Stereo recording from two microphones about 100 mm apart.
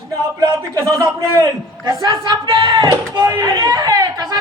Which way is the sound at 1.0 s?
40° right (ahead or behind).